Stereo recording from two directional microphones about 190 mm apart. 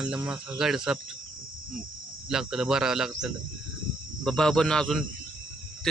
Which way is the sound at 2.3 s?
Centre (ahead or behind).